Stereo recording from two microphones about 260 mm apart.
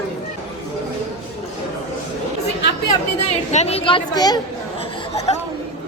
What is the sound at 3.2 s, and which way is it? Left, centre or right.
Speech, left.